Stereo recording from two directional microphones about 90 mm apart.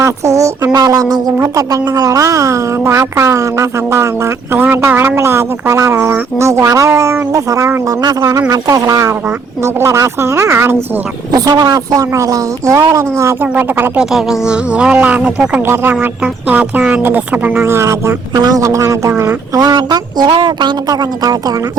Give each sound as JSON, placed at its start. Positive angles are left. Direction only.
{"t": 0.0, "sound": "a woman's voice", "side_deg": -35}
{"t": 11.3, "sound": "a woman's voice", "side_deg": -45}
{"t": 13.4, "sound": "speech", "side_deg": -25}
{"t": 13.9, "sound": "speech", "side_deg": -5}
{"t": 15.6, "sound": "speech", "side_deg": -25}
{"t": 17.6, "sound": "a woman's voice", "side_deg": -30}
{"t": 18.3, "sound": "a woman's voice", "side_deg": -45}
{"t": 19.5, "sound": "a woman's voice", "side_deg": -50}